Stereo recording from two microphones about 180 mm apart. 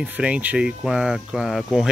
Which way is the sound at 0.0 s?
10° right (ahead or behind).